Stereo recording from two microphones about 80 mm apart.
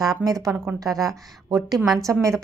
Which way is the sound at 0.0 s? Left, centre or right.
Right.